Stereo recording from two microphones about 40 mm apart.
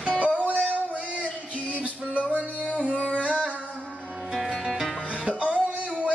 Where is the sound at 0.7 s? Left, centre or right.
Right.